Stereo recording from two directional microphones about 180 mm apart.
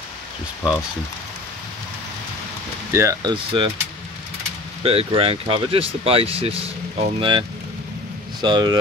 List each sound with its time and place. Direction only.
2.9 s speech: 15° right (ahead or behind)
4.8 s speech: 30° right (ahead or behind)